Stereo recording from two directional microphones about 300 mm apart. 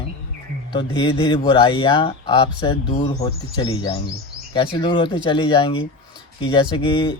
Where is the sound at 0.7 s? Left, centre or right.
Centre.